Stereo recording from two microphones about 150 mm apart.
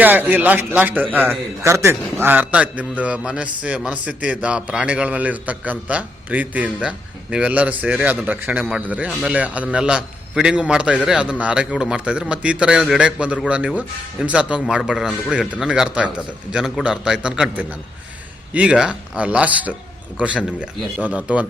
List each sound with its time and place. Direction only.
0.0 s a man's voice: 10° right (ahead or behind)